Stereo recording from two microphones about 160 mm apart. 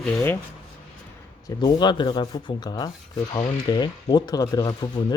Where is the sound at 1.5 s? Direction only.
25° left (ahead or behind).